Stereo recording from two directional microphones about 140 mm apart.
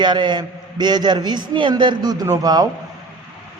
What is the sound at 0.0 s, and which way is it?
A man's voice, 35° right (ahead or behind).